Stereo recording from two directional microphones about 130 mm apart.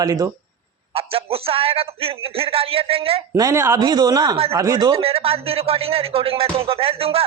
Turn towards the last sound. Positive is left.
turn(degrees=-50)  # may be behind; listen again after turning